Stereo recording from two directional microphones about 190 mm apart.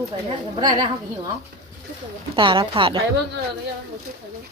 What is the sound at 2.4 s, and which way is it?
Speech, 25° right (ahead or behind).